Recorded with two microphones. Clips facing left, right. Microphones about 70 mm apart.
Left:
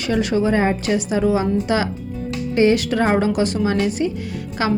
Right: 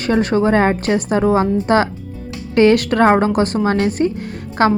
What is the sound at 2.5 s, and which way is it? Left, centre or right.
Speech, right.